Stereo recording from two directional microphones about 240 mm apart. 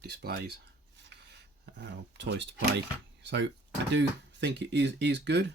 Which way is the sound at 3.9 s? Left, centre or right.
Right.